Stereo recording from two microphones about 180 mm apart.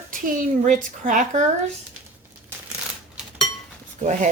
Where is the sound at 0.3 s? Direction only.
45° right (ahead or behind).